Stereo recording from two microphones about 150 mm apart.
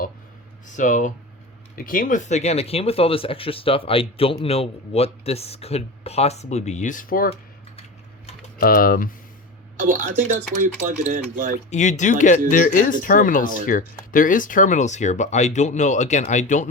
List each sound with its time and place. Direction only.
0.8 s speech: 55° left (ahead or behind)
1.7 s speech: 65° left (ahead or behind)
8.5 s speech: 80° left
9.7 s speech: 60° right (ahead or behind)
11.7 s speech: 55° left (ahead or behind)